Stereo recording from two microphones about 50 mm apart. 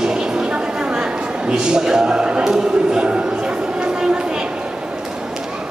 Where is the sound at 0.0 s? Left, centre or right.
Centre.